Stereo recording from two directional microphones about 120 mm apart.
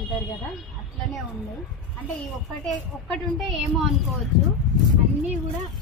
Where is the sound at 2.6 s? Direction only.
Centre (ahead or behind).